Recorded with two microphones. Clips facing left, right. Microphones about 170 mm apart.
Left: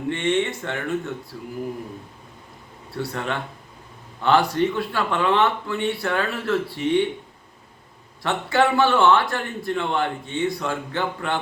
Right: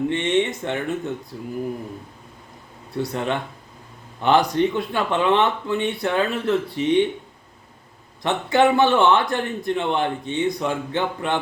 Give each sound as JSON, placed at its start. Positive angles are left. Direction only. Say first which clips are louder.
{"t": 0.1, "sound": "a man's voice", "louder": "right 2 dB", "side_deg": -20}
{"t": 2.9, "sound": "a man's voice", "louder": "right 3 dB", "side_deg": -20}
{"t": 8.2, "sound": "a man's voice", "louder": "right 3 dB", "side_deg": -20}